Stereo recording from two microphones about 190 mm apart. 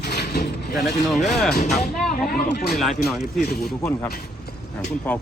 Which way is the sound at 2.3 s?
55° left (ahead or behind).